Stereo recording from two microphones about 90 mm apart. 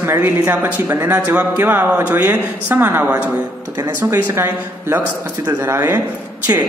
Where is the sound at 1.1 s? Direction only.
20° right (ahead or behind).